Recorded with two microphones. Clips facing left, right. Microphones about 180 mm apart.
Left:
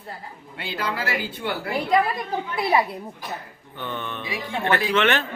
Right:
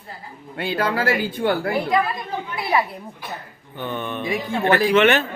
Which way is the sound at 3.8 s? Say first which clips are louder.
Right 4 dB; 10° right (ahead or behind).